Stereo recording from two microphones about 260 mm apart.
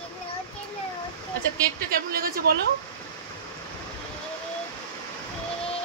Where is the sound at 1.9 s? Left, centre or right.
Right.